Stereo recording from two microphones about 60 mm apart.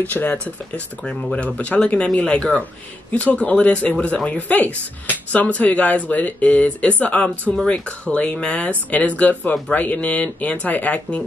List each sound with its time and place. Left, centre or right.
0.0 s speech: left
0.7 s speech: centre